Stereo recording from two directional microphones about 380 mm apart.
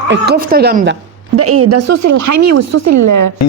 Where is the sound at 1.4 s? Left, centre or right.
Right.